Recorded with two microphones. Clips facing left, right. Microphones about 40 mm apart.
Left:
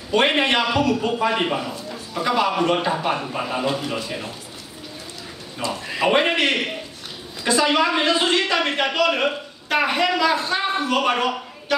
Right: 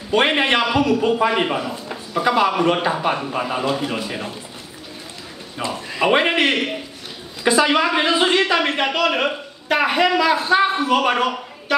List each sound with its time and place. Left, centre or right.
0.1 s a man's voice: centre
5.6 s a man's voice: centre